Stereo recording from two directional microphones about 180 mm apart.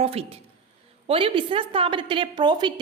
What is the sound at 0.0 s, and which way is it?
A woman's voice, 35° right (ahead or behind).